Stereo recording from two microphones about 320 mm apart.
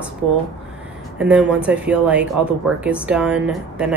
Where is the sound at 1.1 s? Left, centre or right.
Centre.